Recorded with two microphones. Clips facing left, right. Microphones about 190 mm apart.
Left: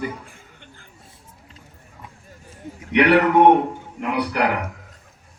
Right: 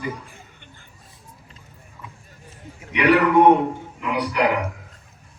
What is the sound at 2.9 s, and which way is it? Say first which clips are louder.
A man's voice: left 1 dB; 65° left (ahead or behind).